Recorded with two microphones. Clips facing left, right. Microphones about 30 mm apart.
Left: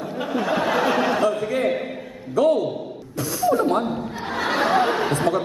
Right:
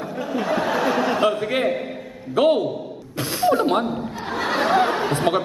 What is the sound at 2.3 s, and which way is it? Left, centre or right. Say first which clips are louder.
A man's voice: right 1 dB; right.